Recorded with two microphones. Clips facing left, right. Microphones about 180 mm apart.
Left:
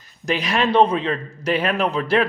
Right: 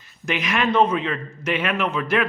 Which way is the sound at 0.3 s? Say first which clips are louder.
Left 2 dB; 35° left (ahead or behind).